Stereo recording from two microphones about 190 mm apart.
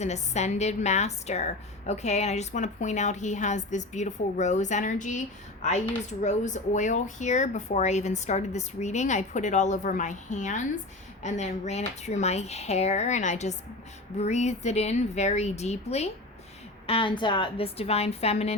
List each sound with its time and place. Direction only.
0.0 s a woman's voice: 35° left (ahead or behind)